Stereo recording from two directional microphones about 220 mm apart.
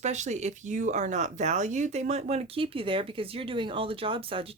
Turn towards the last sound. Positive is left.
turn(degrees=-25)  # may be behind; listen again after turning